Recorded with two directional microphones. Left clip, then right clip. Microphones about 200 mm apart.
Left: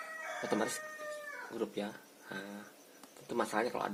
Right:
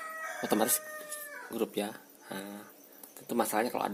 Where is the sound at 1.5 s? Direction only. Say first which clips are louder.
Right 6 dB; 40° right (ahead or behind).